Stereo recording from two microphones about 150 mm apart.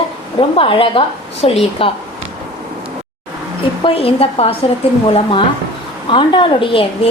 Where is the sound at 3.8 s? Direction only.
40° left (ahead or behind).